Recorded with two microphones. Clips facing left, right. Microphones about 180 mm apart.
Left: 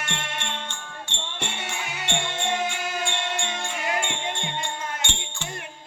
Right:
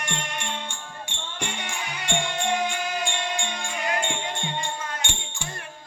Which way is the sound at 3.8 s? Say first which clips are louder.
Right 1 dB; 20° left (ahead or behind).